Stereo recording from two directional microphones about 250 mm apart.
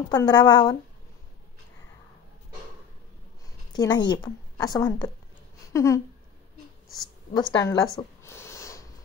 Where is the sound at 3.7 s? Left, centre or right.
Centre.